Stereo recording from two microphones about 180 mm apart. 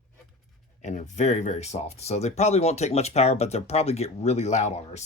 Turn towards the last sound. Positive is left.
turn(degrees=40)  # may be behind; listen again after turning